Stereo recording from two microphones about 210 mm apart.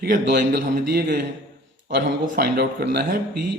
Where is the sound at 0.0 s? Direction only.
50° right (ahead or behind).